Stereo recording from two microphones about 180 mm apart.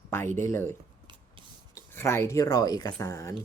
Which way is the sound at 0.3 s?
15° left (ahead or behind).